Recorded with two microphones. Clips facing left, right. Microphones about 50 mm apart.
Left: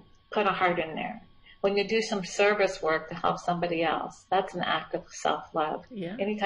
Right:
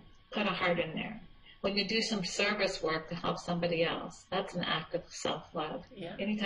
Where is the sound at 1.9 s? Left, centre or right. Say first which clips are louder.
Left 6 dB; centre.